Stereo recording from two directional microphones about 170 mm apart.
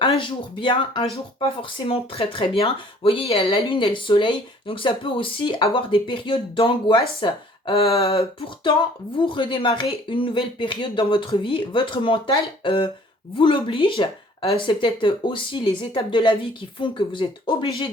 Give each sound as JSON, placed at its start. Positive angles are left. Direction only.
{"t": 0.0, "sound": "speech", "side_deg": 30}